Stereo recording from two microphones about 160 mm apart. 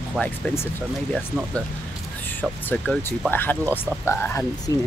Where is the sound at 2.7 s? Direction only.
10° left (ahead or behind).